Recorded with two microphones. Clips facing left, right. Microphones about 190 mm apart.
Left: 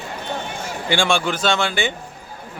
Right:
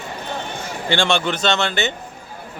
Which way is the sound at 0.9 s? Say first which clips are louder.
Even; 10° left (ahead or behind).